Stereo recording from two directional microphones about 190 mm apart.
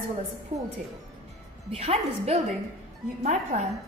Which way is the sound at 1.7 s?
35° right (ahead or behind).